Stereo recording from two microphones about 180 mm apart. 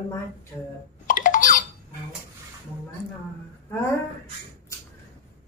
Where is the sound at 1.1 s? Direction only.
50° left (ahead or behind).